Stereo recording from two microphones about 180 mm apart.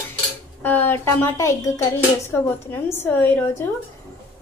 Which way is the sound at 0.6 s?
10° left (ahead or behind).